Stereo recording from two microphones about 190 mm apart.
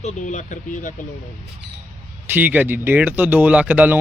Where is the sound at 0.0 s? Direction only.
40° left (ahead or behind).